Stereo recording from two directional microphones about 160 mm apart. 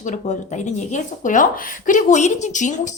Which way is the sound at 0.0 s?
50° left (ahead or behind).